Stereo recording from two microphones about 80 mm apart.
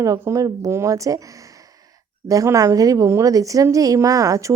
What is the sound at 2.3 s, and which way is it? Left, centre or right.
A woman's voice, right.